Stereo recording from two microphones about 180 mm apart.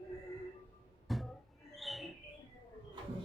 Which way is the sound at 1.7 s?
Centre (ahead or behind).